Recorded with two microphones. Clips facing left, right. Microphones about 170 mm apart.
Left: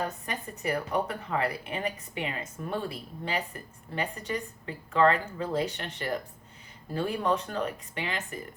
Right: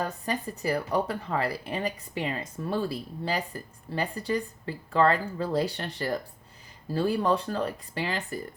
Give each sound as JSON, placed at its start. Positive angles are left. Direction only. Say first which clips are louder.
{"t": 0.0, "sound": "speech", "louder": "right 3 dB", "side_deg": -35}